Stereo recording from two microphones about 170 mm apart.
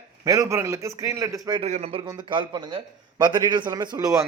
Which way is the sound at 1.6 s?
40° right (ahead or behind).